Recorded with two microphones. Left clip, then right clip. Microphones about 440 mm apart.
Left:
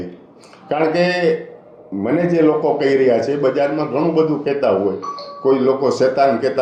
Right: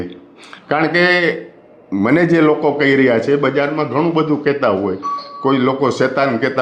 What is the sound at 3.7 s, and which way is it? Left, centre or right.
Speech, right.